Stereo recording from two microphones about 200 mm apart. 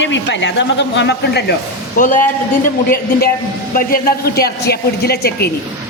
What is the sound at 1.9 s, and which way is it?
A man's voice, 40° left (ahead or behind).